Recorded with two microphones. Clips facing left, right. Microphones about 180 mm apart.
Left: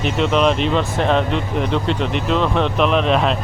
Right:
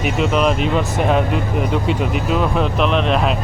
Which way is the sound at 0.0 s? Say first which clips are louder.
Even; 5° right (ahead or behind).